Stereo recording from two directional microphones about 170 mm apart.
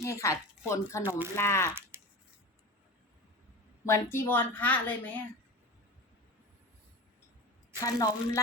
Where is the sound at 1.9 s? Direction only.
15° right (ahead or behind).